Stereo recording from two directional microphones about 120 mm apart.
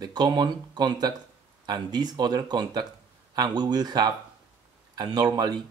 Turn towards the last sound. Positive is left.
turn(degrees=-35)  # may be behind; listen again after turning